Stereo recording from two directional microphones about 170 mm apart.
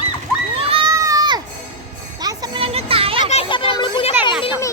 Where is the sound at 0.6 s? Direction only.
35° right (ahead or behind).